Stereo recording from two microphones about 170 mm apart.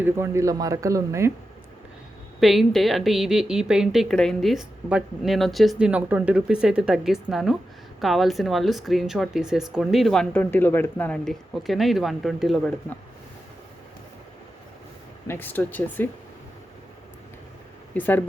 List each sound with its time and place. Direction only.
0.0 s speech: 15° right (ahead or behind)
2.4 s speech: centre (ahead or behind)
15.3 s speech: 10° left (ahead or behind)
17.9 s speech: 10° left (ahead or behind)